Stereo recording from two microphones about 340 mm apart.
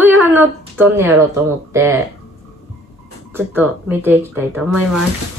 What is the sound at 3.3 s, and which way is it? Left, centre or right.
A woman's voice, centre.